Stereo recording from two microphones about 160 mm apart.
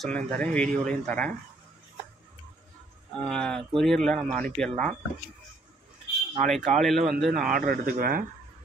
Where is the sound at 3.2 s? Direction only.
5° left (ahead or behind).